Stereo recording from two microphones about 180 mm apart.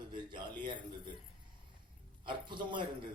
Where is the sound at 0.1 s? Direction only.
25° right (ahead or behind).